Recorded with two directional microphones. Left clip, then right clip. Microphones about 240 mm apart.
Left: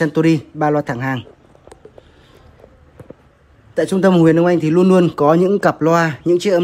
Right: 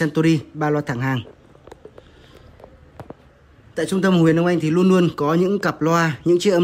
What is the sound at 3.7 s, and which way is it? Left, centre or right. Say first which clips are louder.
Speech: left 6 dB; centre.